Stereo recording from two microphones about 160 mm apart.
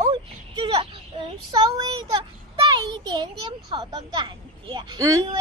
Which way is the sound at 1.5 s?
25° right (ahead or behind).